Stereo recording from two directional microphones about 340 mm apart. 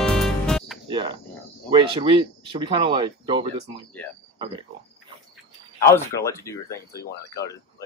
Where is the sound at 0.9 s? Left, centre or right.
Centre.